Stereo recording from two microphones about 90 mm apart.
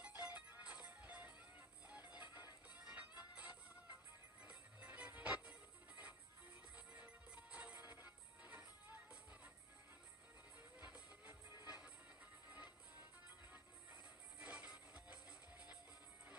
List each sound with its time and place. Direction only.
0.2 s music: 15° right (ahead or behind)
10.8 s music: 20° right (ahead or behind)
14.4 s music: 15° right (ahead or behind)